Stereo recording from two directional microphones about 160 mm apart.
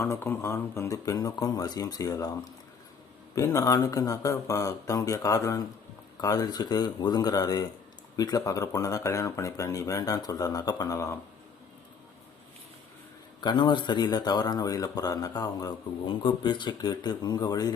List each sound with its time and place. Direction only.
0.0 s a man's voice: 15° left (ahead or behind)
13.4 s a man's voice: 30° left (ahead or behind)